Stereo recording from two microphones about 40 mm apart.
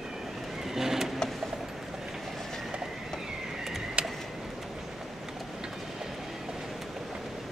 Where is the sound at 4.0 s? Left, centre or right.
Right.